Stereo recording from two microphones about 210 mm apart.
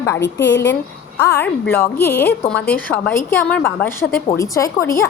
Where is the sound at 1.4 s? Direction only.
10° left (ahead or behind).